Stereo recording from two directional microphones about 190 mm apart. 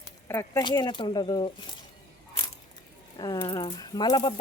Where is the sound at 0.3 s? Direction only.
15° left (ahead or behind).